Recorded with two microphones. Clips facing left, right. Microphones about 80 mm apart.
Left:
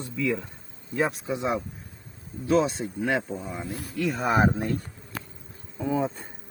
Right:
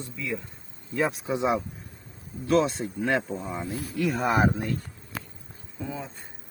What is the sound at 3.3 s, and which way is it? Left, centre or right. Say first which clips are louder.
Speech: right 1 dB; centre.